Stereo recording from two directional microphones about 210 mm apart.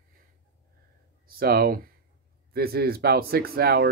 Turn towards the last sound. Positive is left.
turn(degrees=-45)  # may be behind; listen again after turning